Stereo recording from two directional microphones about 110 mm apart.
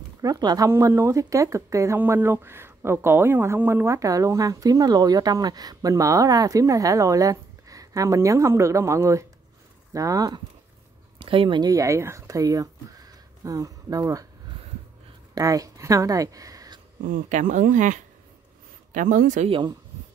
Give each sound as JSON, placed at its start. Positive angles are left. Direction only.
{"t": 0.2, "sound": "speech", "side_deg": -35}
{"t": 0.7, "sound": "speech", "side_deg": -25}
{"t": 11.1, "sound": "speech", "side_deg": -50}
{"t": 11.7, "sound": "speech", "side_deg": -30}
{"t": 15.3, "sound": "speech", "side_deg": -35}
{"t": 17.3, "sound": "speech", "side_deg": -90}
{"t": 19.4, "sound": "speech", "side_deg": -90}